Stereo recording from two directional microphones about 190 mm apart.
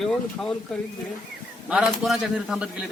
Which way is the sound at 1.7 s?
Centre (ahead or behind).